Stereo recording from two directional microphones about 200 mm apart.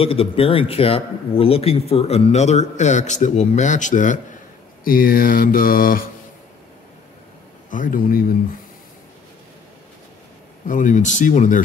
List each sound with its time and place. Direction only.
0.0 s a man's voice: 30° left (ahead or behind)
4.8 s mantra: 45° left (ahead or behind)
7.7 s mantra: 40° left (ahead or behind)
10.7 s a man's voice: 40° left (ahead or behind)